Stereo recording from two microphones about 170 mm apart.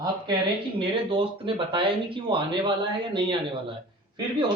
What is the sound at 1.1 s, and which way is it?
Speech, 30° right (ahead or behind).